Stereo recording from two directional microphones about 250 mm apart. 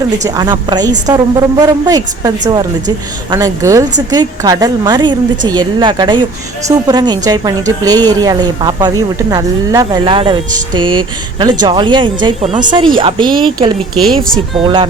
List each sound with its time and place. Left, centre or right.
0.3 s a woman's voice: centre
14.0 s speech: centre